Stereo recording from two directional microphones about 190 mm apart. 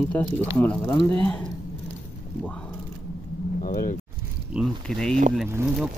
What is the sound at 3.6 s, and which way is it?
Vehicle, 45° left (ahead or behind).